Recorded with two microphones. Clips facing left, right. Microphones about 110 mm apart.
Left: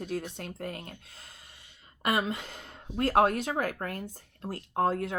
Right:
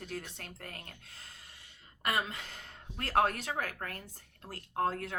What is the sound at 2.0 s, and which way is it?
Speech, 20° left (ahead or behind).